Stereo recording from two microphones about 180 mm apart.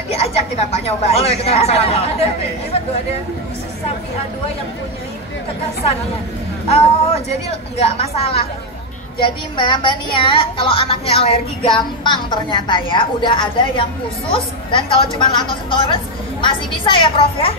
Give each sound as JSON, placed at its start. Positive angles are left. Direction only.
{"t": 0.1, "sound": "a woman's voice", "side_deg": 35}
{"t": 7.2, "sound": "a woman's voice", "side_deg": 35}